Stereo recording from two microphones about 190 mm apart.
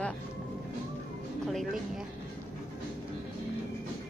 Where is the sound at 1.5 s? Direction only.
Centre (ahead or behind).